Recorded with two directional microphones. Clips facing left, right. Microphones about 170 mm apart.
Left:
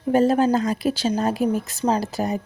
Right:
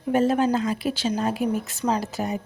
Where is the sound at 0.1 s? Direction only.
35° left (ahead or behind).